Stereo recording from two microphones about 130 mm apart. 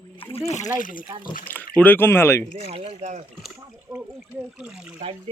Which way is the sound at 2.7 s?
50° right (ahead or behind).